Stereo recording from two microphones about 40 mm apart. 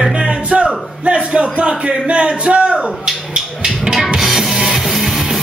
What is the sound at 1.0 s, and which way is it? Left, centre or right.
A man's voice, right.